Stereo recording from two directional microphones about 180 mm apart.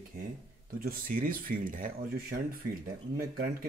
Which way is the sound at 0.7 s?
50° right (ahead or behind).